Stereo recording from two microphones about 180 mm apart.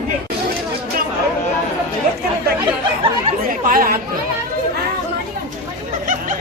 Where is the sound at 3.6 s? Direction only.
50° right (ahead or behind).